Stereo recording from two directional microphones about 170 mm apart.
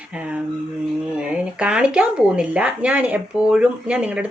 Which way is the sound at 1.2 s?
5° right (ahead or behind).